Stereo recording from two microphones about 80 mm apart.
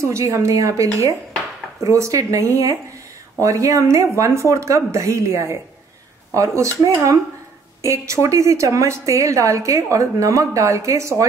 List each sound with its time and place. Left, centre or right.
0.0 s a woman's voice: right